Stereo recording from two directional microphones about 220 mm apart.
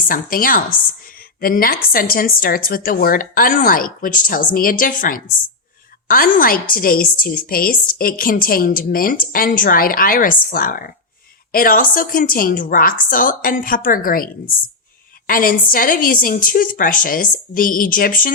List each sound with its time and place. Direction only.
0.0 s a woman's voice: 40° left (ahead or behind)
15.3 s a woman's voice: 40° left (ahead or behind)